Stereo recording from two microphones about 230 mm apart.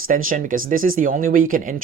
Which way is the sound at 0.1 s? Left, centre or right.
Right.